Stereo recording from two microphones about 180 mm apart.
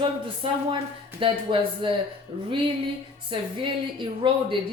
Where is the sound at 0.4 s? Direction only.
30° right (ahead or behind).